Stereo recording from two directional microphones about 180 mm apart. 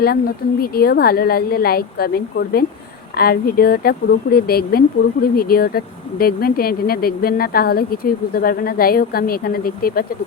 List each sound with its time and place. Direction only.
0.0 s speech: 60° left (ahead or behind)